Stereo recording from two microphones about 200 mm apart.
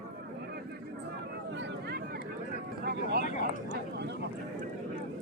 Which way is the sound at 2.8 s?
50° right (ahead or behind).